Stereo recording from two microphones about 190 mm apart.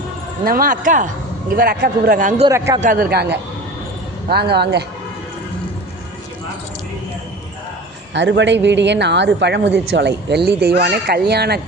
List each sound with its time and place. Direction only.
0.4 s speech: 50° right (ahead or behind)
2.5 s a man's voice: 15° right (ahead or behind)
2.8 s speech: 50° right (ahead or behind)
8.1 s speech: 70° right (ahead or behind)